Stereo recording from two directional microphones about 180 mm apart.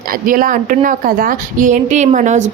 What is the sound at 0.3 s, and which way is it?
A woman's voice, 50° right (ahead or behind).